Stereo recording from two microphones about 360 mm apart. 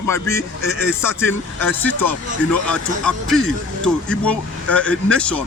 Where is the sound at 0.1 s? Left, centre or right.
Centre.